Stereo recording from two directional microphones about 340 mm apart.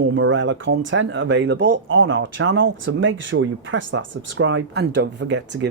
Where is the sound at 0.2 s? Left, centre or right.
Right.